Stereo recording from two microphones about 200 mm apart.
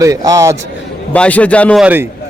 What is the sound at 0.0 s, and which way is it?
Speech, 15° right (ahead or behind).